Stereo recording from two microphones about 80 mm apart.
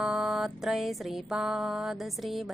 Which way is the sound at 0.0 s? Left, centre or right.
Centre.